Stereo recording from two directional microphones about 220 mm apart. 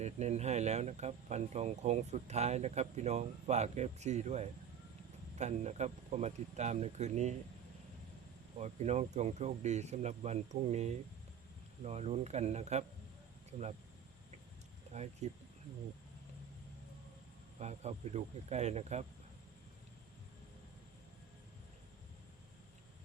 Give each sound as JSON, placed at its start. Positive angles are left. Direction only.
{"t": 0.0, "sound": "speech", "side_deg": -30}
{"t": 8.5, "sound": "speech", "side_deg": -30}
{"t": 14.9, "sound": "speech", "side_deg": -30}
{"t": 17.6, "sound": "speech", "side_deg": -30}